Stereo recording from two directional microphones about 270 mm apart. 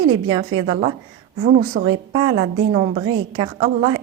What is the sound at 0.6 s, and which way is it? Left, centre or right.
A woman's voice, right.